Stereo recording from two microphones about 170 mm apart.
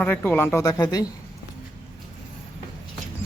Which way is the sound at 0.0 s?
10° left (ahead or behind).